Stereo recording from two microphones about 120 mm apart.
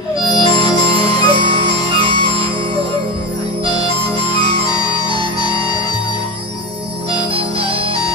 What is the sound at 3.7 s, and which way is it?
Music, 40° left (ahead or behind).